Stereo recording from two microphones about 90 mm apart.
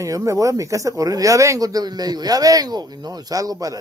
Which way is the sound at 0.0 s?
35° right (ahead or behind).